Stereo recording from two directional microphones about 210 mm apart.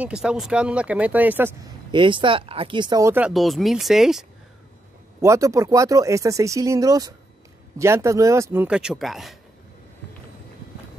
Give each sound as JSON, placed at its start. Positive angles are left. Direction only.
{"t": 0.0, "sound": "speech", "side_deg": -5}
{"t": 1.9, "sound": "speech", "side_deg": -25}
{"t": 5.2, "sound": "speech", "side_deg": -15}